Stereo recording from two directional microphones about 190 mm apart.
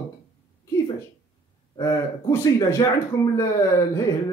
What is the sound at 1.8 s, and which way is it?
Speech, 15° left (ahead or behind).